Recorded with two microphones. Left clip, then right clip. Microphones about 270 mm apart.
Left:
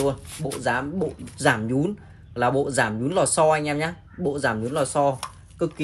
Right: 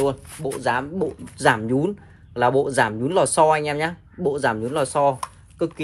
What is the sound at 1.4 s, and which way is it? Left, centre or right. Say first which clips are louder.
Speech: right 3 dB; right.